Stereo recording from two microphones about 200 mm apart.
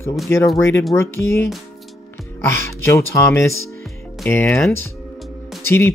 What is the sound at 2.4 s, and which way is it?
Speech, 15° left (ahead or behind).